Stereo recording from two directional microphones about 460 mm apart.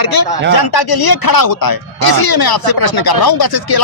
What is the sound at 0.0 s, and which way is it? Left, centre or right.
Speech, left.